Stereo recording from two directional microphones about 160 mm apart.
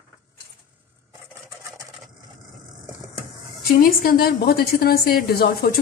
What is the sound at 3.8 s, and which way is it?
A woman's voice, 65° left (ahead or behind).